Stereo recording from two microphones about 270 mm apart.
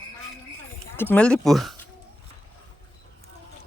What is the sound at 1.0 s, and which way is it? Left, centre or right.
Speech, centre.